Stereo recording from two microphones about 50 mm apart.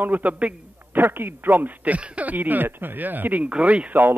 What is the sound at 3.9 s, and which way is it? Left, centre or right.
Speech, right.